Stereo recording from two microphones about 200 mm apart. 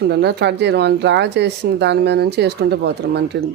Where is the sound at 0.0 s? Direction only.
55° right (ahead or behind).